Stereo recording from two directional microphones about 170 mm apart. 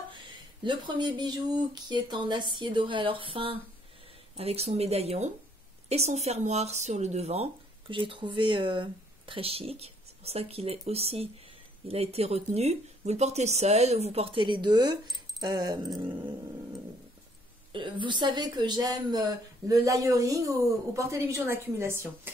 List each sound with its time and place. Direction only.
0.1 s a woman's voice: 30° right (ahead or behind)
17.7 s a woman's voice: 30° right (ahead or behind); by 22.3 s 15° right (ahead or behind)